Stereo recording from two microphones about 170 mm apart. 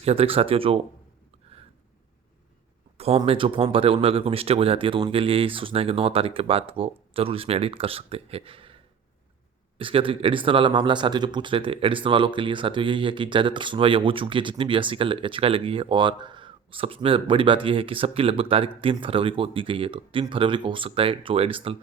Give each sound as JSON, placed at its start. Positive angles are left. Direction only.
{"t": 0.0, "sound": "speech", "side_deg": -35}
{"t": 3.2, "sound": "speech", "side_deg": -30}